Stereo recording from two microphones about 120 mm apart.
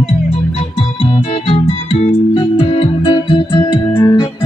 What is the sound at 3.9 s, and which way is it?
Organ, 30° left (ahead or behind).